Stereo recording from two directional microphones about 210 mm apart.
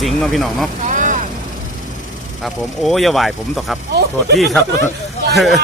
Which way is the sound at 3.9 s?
50° right (ahead or behind).